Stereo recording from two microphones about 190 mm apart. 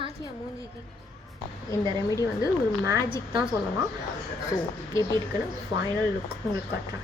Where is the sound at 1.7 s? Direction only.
15° left (ahead or behind).